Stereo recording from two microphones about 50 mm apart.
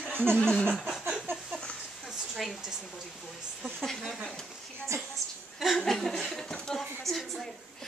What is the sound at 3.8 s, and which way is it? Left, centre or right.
Speech, centre.